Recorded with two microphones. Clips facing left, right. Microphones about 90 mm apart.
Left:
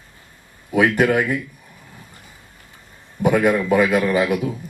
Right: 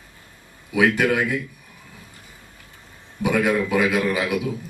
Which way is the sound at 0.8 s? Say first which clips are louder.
Left 2 dB; 55° left (ahead or behind).